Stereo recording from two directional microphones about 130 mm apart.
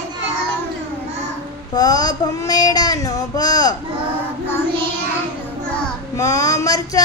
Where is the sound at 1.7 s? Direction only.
30° left (ahead or behind).